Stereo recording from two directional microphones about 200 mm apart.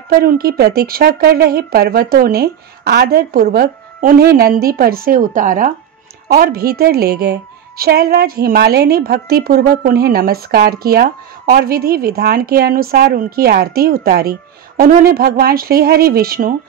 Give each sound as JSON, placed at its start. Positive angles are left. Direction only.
{"t": 0.2, "sound": "a woman's voice", "side_deg": -50}